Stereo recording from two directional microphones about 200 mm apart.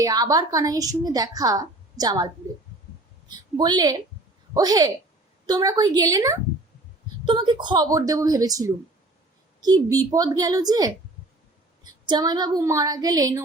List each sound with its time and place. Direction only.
0.0 s a woman's voice: 20° right (ahead or behind)